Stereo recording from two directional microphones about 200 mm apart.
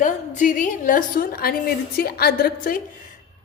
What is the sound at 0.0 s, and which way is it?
A woman's voice, 40° left (ahead or behind).